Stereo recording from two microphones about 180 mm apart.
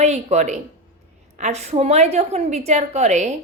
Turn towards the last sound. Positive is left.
turn(degrees=-40)  # may be behind; listen again after turning